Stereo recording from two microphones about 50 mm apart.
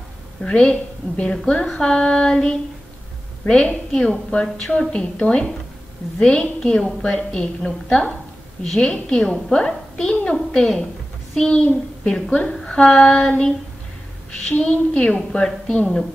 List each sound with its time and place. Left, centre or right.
0.4 s a woman's voice: left
1.5 s female singing: centre
3.4 s a woman's voice: centre
10.5 s female singing: centre
12.0 s a woman's voice: left
12.6 s female singing: centre
14.7 s female singing: centre